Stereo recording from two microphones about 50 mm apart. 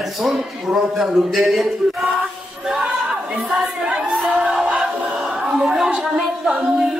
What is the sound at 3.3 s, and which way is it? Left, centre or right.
Speech, centre.